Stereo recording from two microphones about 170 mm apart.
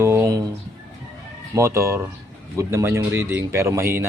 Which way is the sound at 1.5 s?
15° right (ahead or behind).